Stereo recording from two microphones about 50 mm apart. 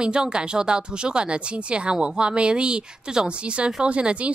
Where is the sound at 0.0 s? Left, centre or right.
Centre.